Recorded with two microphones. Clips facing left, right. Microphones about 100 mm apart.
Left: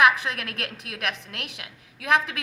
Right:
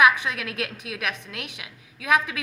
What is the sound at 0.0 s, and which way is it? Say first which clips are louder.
A woman's voice: right 1 dB; 35° left (ahead or behind).